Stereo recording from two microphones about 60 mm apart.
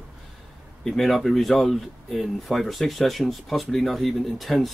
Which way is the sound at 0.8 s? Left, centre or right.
Centre.